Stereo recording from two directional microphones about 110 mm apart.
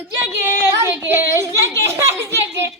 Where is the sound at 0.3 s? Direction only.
20° right (ahead or behind).